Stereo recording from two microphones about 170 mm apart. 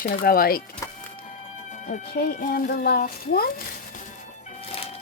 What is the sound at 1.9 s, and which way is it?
Speech, 55° left (ahead or behind).